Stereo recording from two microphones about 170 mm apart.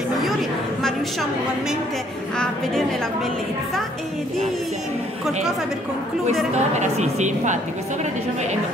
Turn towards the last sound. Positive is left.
turn(degrees=-45)  # may be behind; listen again after turning